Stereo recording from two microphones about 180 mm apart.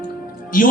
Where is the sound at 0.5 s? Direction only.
50° left (ahead or behind).